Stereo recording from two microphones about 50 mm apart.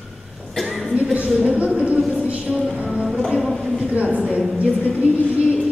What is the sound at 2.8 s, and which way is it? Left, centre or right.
Music, centre.